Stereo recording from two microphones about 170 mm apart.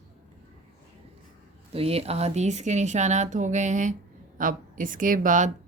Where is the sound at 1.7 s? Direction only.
35° right (ahead or behind).